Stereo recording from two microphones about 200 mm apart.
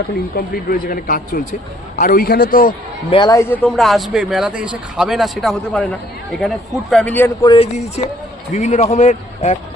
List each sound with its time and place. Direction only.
0.3 s a man's voice: 45° left (ahead or behind)
3.1 s a man's voice: 20° left (ahead or behind)
3.6 s speech: centre (ahead or behind)
7.4 s a man's voice: 25° left (ahead or behind)